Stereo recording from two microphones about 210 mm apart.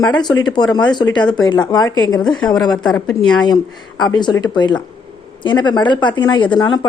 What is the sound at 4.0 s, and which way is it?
Speech, 20° left (ahead or behind).